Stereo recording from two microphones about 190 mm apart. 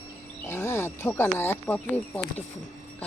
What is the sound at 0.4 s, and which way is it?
Speech, 15° left (ahead or behind).